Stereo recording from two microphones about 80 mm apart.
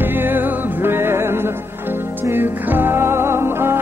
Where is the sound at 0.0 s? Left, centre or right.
Right.